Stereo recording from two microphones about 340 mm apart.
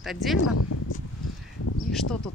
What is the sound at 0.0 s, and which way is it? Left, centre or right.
Speech, centre.